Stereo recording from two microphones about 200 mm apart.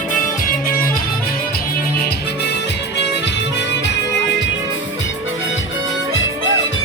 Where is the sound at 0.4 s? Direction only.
45° left (ahead or behind).